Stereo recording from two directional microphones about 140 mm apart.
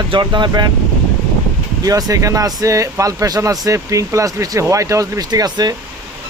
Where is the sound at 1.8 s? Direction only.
25° right (ahead or behind).